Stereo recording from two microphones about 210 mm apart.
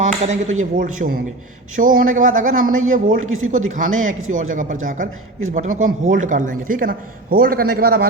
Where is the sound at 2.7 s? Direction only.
75° right (ahead or behind).